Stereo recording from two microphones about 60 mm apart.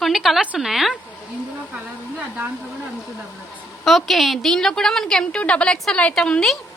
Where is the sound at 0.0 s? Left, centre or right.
Centre.